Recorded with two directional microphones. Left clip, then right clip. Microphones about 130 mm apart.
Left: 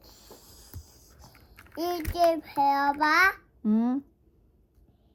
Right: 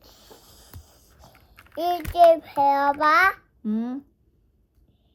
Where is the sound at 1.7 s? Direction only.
30° right (ahead or behind).